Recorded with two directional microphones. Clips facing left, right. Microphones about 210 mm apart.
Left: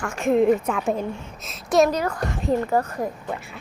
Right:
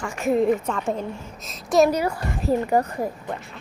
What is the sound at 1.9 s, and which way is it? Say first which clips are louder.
A woman's voice: right 1 dB; 10° right (ahead or behind).